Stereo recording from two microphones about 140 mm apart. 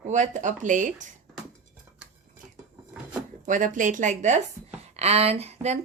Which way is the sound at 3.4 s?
65° right (ahead or behind).